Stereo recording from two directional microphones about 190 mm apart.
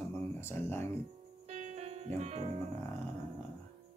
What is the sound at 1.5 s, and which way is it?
Music, 35° right (ahead or behind).